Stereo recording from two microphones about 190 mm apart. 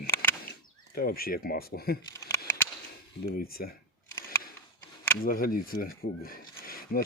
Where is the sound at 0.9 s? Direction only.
50° left (ahead or behind).